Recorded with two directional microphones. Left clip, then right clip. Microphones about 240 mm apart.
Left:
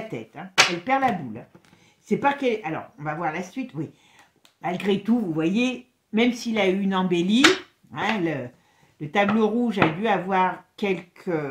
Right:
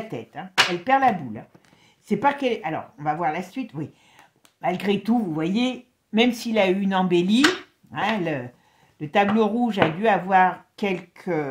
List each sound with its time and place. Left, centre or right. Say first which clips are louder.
0.1 s speech: right 1 dB; right
2.0 s speech: right 1 dB; right